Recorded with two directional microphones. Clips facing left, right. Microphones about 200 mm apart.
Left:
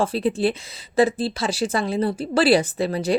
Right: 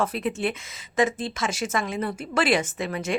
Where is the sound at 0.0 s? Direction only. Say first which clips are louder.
Left 5 dB; 30° left (ahead or behind).